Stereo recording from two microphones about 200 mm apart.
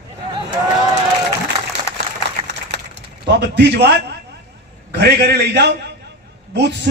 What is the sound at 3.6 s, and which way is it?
Speech, 60° right (ahead or behind).